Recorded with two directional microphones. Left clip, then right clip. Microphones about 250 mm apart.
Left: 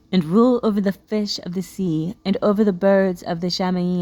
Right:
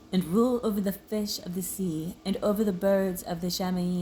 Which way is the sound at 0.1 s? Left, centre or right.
Left.